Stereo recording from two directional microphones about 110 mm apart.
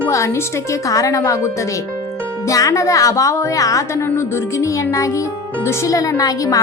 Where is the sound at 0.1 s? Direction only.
25° left (ahead or behind).